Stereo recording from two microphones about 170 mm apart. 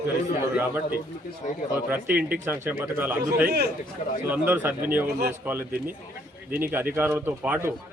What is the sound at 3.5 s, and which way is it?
Speech, 70° right (ahead or behind).